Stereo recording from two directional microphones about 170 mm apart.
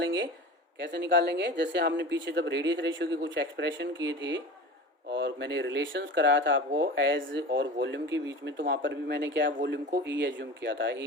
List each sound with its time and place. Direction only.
0.0 s speech: 90° right